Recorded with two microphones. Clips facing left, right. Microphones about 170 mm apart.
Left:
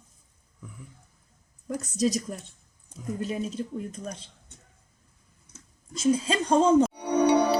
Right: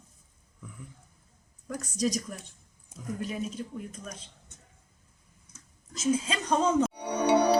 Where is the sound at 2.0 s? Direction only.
25° left (ahead or behind).